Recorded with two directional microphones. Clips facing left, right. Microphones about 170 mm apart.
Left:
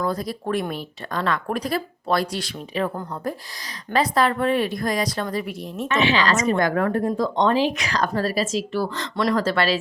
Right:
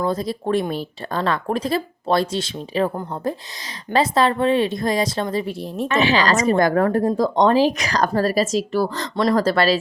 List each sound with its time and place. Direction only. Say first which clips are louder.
0.0 s speech: right 3 dB; 25° right (ahead or behind)